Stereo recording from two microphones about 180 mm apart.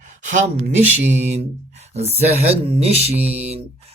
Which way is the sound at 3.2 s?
35° right (ahead or behind).